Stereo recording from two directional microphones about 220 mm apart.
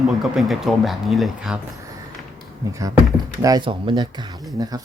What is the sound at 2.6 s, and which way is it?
Speech, 15° right (ahead or behind).